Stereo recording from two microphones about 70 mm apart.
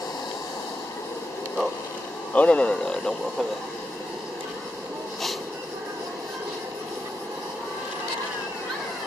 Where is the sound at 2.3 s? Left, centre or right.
Centre.